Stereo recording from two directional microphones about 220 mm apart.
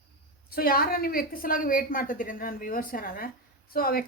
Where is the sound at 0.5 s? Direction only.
40° left (ahead or behind).